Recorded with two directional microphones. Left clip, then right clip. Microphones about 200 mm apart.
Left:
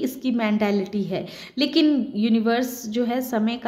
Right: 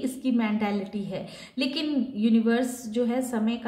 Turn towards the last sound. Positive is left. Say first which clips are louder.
# left 4 dB
turn(degrees=40)  # may be behind; listen again after turning